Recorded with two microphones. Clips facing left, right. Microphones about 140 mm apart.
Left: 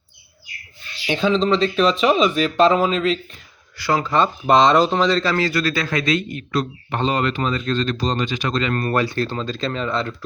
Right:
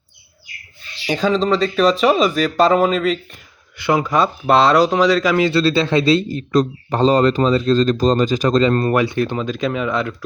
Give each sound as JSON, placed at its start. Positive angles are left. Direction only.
{"t": 1.0, "sound": "speech", "side_deg": -5}
{"t": 3.8, "sound": "speech", "side_deg": -15}
{"t": 5.5, "sound": "speech", "side_deg": -30}
{"t": 8.9, "sound": "speech", "side_deg": -15}